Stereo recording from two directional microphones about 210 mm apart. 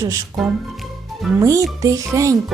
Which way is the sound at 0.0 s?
15° right (ahead or behind).